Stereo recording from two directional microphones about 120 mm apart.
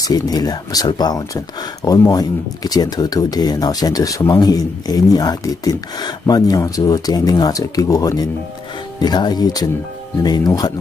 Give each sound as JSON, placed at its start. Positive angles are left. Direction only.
{"t": 0.0, "sound": "speech", "side_deg": 30}